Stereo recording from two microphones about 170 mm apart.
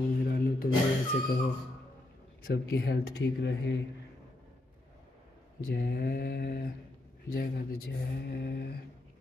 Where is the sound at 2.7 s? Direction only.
70° left (ahead or behind); by 3.7 s 90° left.